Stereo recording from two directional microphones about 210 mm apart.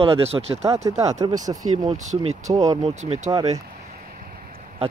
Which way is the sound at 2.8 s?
30° right (ahead or behind).